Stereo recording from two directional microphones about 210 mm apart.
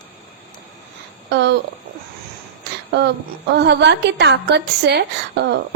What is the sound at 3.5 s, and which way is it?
A woman's voice, 55° right (ahead or behind).